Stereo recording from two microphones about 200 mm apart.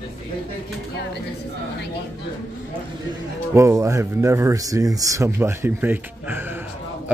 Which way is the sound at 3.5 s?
15° right (ahead or behind).